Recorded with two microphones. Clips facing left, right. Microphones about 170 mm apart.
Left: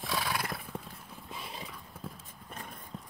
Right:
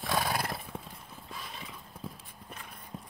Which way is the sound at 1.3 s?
30° left (ahead or behind).